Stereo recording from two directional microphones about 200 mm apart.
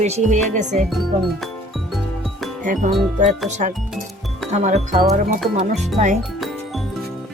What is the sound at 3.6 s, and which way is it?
Speech, 40° right (ahead or behind).